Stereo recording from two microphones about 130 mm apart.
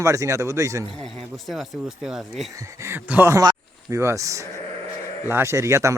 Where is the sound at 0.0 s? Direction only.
25° right (ahead or behind).